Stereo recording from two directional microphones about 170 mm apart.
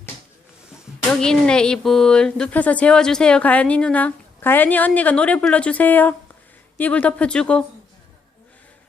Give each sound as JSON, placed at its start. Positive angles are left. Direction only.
{"t": 1.1, "sound": "a woman's voice", "side_deg": 5}